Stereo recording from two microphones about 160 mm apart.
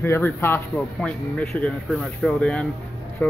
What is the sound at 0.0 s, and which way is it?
Speech, 15° left (ahead or behind).